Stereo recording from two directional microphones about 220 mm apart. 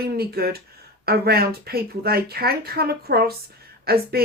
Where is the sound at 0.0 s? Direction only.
45° right (ahead or behind).